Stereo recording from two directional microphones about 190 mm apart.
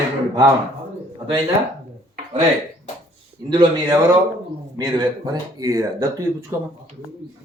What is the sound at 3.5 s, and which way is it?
Speech, 20° right (ahead or behind).